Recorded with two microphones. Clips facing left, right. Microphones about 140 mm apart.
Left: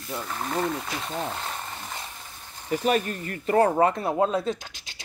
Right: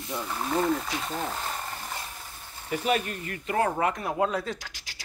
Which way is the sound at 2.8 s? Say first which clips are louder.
Left 3 dB; 40° left (ahead or behind).